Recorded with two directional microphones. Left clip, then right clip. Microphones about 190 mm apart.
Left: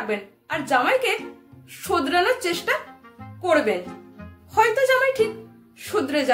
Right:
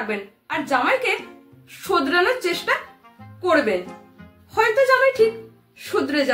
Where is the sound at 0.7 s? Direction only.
15° left (ahead or behind).